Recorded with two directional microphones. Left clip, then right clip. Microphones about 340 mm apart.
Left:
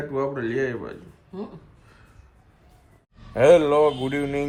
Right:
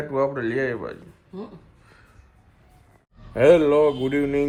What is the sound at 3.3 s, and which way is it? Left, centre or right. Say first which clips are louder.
Speech: even; centre.